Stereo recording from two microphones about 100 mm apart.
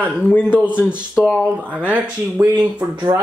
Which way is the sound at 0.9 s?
10° right (ahead or behind).